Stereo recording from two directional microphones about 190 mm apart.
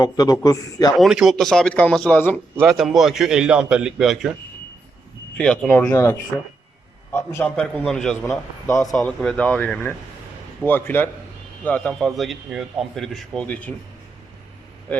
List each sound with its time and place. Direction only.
0.0 s a man's voice: 20° left (ahead or behind)
0.9 s speech: centre (ahead or behind)
5.4 s speech: 5° left (ahead or behind)